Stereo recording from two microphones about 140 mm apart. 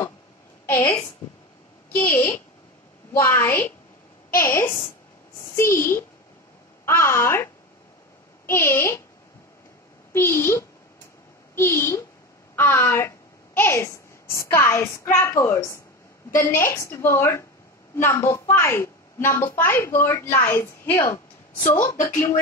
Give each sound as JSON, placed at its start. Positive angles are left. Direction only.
{"t": 0.7, "sound": "a woman's voice", "side_deg": 20}
{"t": 8.5, "sound": "a woman's voice", "side_deg": 15}
{"t": 10.1, "sound": "a woman's voice", "side_deg": 15}